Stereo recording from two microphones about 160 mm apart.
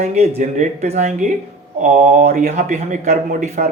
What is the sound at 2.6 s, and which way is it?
Speech, 50° right (ahead or behind).